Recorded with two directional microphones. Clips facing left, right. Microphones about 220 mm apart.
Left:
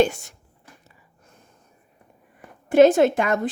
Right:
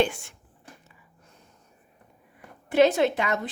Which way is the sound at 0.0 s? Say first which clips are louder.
Left 5 dB; 40° left (ahead or behind).